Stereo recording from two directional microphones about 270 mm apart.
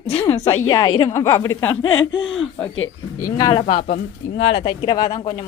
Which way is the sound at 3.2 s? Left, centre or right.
Centre.